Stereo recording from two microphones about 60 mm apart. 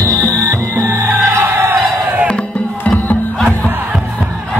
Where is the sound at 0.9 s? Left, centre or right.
Right.